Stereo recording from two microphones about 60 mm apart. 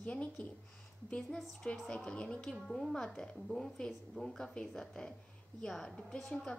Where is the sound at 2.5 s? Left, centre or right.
Centre.